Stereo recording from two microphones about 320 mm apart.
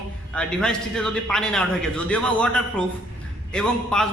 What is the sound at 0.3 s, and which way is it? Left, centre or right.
A man's voice, centre.